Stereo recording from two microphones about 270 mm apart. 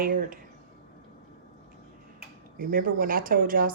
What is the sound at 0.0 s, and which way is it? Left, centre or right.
Speech, right.